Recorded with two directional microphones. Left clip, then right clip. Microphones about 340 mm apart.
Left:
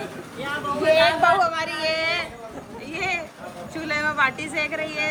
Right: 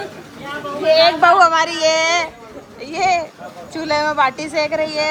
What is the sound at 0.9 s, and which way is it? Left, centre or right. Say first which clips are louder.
A woman's voice: right 6 dB; right.